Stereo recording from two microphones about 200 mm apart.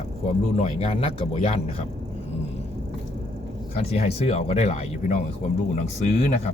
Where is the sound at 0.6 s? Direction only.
30° left (ahead or behind).